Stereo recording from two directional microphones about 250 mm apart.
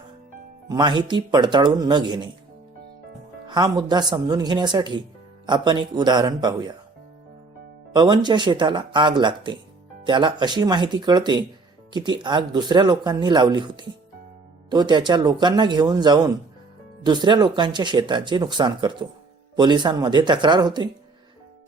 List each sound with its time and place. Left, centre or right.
0.7 s speech: centre
3.4 s speech: centre
7.9 s speech: centre